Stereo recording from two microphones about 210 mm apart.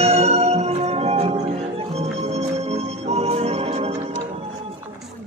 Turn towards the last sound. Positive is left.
turn(degrees=-30)  # may be behind; listen again after turning